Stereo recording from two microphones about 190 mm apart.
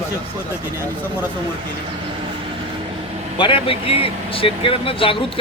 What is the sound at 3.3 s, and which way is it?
Speech, 25° left (ahead or behind).